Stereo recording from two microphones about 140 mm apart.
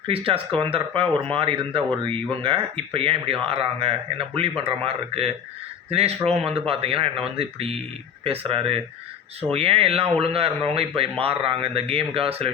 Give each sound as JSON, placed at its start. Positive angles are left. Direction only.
{"t": 0.1, "sound": "speech", "side_deg": -40}